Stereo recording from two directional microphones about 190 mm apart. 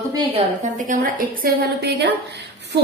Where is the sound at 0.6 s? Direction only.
40° right (ahead or behind).